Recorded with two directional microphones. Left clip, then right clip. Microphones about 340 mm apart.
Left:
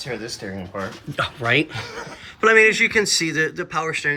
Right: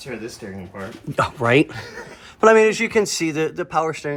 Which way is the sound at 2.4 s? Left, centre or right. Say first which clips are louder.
Even; centre.